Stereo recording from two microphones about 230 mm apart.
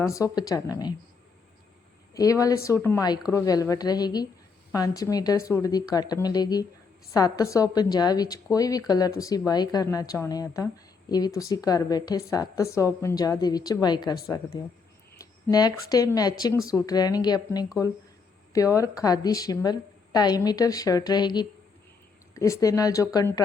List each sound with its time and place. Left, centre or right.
0.0 s a woman's voice: centre
2.1 s a woman's voice: centre